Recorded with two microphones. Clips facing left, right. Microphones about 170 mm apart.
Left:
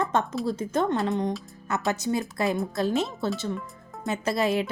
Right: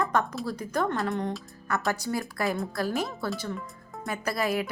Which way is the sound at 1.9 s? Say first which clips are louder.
Left 5 dB; 20° left (ahead or behind).